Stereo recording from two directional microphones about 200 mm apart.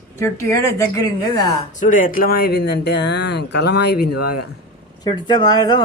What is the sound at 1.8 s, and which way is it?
Speech, 40° left (ahead or behind).